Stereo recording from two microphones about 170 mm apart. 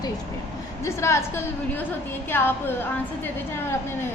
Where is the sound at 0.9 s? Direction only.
15° left (ahead or behind).